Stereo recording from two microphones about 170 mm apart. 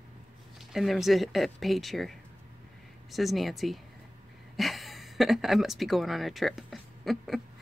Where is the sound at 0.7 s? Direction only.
Centre (ahead or behind).